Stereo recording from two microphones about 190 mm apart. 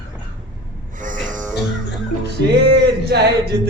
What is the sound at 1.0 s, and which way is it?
Music, 45° right (ahead or behind).